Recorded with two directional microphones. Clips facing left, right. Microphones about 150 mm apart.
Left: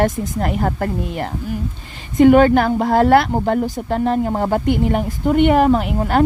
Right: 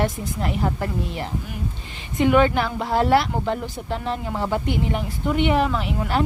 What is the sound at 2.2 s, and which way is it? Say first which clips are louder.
Speech: left 7 dB; 45° left (ahead or behind).